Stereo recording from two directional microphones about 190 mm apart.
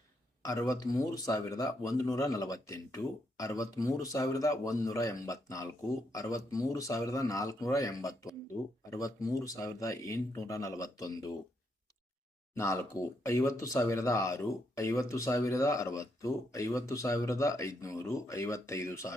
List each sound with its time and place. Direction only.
0.4 s speech: 20° left (ahead or behind)
12.5 s speech: 15° left (ahead or behind)